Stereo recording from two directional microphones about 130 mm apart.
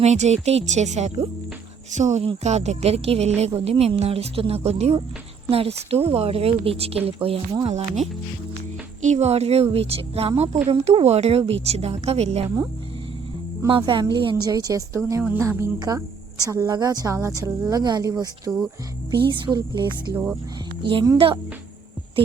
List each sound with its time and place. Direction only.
0.0 s speech: 60° right (ahead or behind)
7.7 s speech: 60° right (ahead or behind)
13.7 s speech: 40° right (ahead or behind)